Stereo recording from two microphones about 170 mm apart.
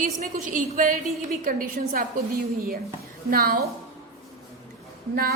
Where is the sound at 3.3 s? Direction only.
60° right (ahead or behind).